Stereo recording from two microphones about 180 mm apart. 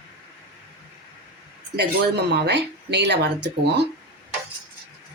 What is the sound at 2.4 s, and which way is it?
Speech, 70° right (ahead or behind).